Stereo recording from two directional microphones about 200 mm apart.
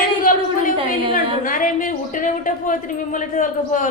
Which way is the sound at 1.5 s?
40° left (ahead or behind).